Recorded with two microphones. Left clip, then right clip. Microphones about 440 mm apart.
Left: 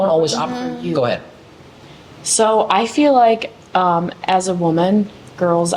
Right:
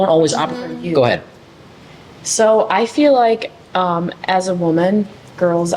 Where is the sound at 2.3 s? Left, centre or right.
Centre.